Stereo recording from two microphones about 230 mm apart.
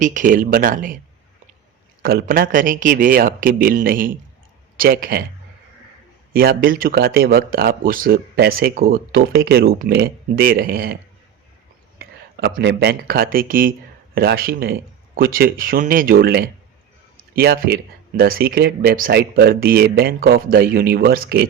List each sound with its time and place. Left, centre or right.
0.0 s speech: right
2.0 s speech: right
6.3 s speech: right